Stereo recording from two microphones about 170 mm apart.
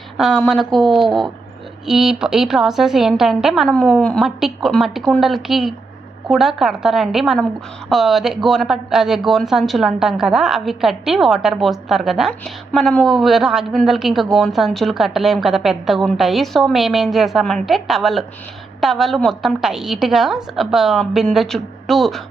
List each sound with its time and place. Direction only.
0.2 s speech: centre (ahead or behind)